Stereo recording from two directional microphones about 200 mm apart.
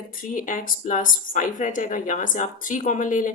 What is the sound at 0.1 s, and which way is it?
Speech, 45° left (ahead or behind).